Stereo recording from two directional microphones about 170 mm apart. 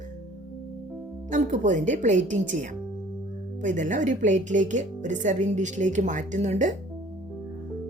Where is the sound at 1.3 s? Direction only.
45° right (ahead or behind).